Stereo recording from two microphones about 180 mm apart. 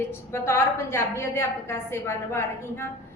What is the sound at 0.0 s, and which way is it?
A woman's voice, 15° left (ahead or behind).